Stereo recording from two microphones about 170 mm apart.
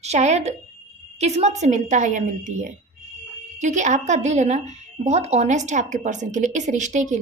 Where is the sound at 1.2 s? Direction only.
40° right (ahead or behind).